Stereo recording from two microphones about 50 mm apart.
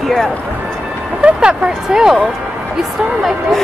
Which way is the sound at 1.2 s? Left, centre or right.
Centre.